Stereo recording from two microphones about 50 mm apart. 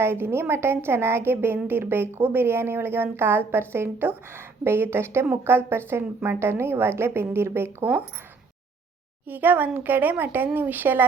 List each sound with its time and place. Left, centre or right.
0.0 s a woman's voice: right
9.2 s speech: right